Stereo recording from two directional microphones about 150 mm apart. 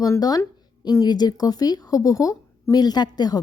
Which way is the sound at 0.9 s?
25° left (ahead or behind).